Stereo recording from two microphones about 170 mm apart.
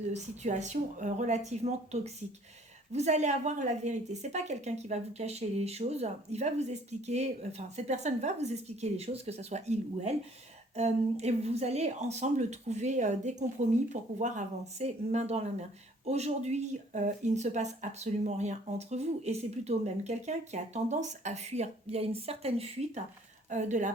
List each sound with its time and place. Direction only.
0.1 s speech: 45° right (ahead or behind)